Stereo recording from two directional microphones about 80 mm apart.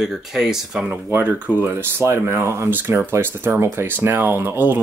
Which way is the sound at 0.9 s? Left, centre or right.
Right.